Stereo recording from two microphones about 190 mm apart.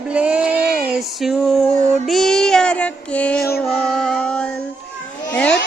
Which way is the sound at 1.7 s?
40° right (ahead or behind).